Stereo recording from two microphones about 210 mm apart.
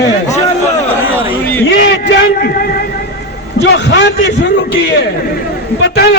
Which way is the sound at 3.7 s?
50° left (ahead or behind).